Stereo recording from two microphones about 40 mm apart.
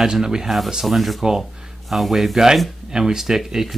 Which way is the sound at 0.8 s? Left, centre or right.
Centre.